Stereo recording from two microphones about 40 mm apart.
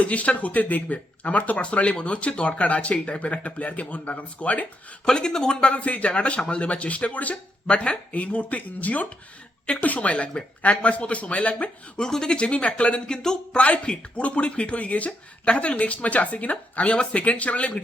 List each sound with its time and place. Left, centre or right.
0.0 s speech: left
5.0 s speech: centre; by 11.7 s left
11.9 s speech: centre
13.6 s speech: left